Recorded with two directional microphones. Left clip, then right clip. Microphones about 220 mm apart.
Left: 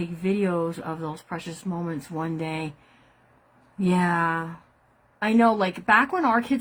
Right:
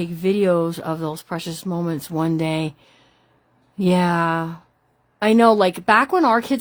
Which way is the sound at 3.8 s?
45° right (ahead or behind).